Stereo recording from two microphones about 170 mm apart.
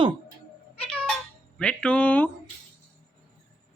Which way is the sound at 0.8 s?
5° left (ahead or behind).